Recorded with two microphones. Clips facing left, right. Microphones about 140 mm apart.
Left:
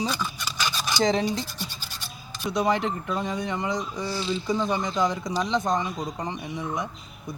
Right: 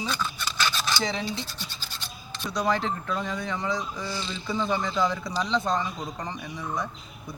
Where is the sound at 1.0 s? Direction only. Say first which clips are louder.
Left 7 dB; 40° left (ahead or behind).